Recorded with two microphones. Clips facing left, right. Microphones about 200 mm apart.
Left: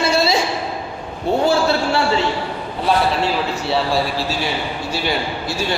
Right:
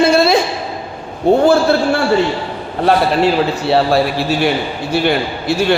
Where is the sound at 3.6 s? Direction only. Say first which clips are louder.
Right 6 dB; 60° right (ahead or behind).